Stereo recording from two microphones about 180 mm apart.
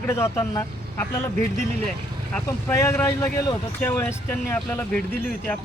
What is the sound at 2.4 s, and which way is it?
Speech, 15° left (ahead or behind).